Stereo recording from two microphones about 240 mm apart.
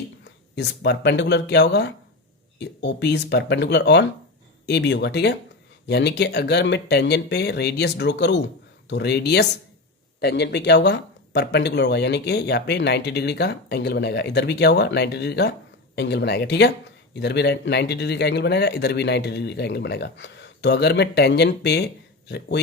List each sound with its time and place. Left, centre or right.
0.3 s speech: left